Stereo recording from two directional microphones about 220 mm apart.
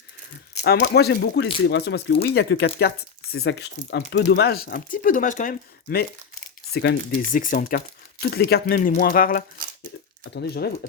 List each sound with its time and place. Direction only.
0.6 s speech: 50° left (ahead or behind)